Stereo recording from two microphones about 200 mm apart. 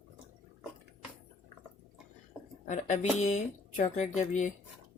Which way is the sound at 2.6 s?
35° left (ahead or behind).